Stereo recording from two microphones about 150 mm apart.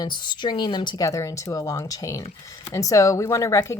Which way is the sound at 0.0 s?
30° left (ahead or behind).